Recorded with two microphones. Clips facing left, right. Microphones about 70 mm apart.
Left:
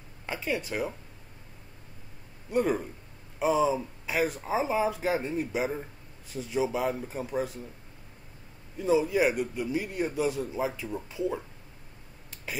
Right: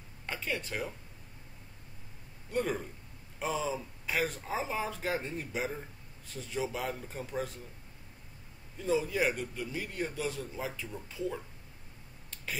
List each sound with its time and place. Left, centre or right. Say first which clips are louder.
0.3 s speech: left 5 dB; centre
2.5 s speech: left 6 dB; centre
8.7 s speech: left 6 dB; centre